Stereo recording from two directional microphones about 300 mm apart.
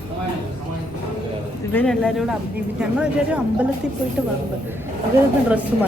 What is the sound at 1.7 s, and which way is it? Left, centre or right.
Speech, centre.